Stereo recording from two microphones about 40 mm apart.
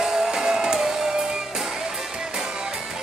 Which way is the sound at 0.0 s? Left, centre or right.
Centre.